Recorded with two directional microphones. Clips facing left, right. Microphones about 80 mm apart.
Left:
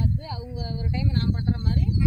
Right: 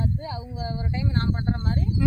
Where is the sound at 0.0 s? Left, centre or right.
Right.